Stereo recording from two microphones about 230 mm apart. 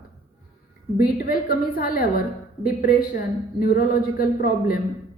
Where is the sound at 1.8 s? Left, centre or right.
Left.